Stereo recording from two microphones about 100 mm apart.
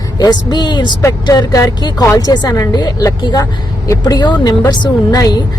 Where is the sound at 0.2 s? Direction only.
45° left (ahead or behind).